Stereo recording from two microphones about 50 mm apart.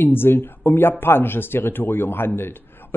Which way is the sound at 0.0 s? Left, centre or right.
Left.